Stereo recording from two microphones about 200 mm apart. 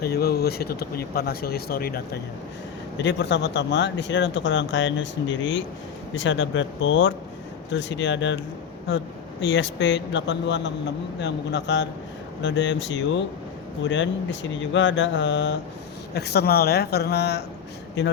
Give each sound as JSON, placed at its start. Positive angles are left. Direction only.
{"t": 0.0, "sound": "speech", "side_deg": 50}
{"t": 3.0, "sound": "speech", "side_deg": 60}
{"t": 9.4, "sound": "speech", "side_deg": 60}